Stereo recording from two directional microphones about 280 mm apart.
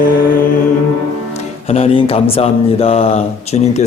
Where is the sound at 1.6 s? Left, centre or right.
Left.